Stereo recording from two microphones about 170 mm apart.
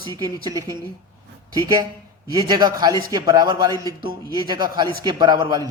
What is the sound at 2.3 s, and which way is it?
Speech, 25° right (ahead or behind).